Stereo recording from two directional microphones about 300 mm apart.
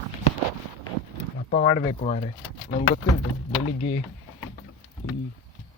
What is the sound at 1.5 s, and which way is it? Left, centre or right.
Speech, centre.